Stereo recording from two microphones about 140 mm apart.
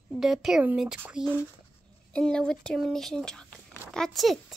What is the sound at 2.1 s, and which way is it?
Speech, 5° left (ahead or behind).